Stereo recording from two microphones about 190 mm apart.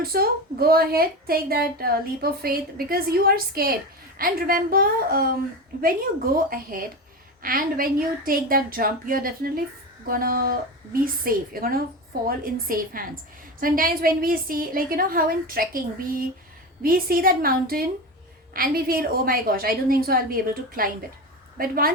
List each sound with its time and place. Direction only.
0.0 s a woman's voice: 50° right (ahead or behind)
6.3 s a woman's voice: 50° right (ahead or behind)